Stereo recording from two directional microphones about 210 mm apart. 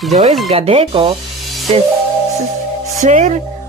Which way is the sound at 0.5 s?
25° right (ahead or behind).